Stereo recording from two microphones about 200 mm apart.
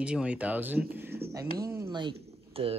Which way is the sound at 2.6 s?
30° right (ahead or behind).